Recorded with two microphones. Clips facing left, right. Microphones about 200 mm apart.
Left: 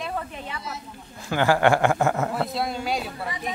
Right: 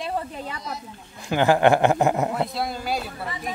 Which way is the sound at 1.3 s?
20° right (ahead or behind).